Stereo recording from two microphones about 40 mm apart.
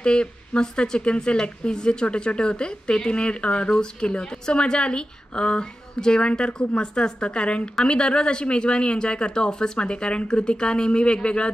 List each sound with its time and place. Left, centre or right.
0.0 s speech: left